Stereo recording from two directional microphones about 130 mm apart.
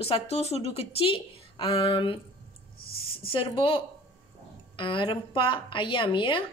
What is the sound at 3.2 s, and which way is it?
A woman's voice, 40° left (ahead or behind).